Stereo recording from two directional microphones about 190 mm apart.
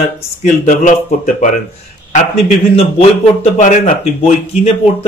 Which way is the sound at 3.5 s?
40° left (ahead or behind).